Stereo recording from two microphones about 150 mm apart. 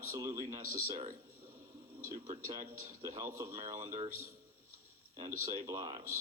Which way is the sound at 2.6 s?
55° right (ahead or behind).